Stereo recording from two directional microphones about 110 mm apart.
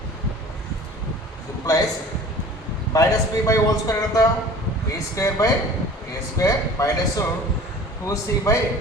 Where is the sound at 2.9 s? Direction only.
30° left (ahead or behind).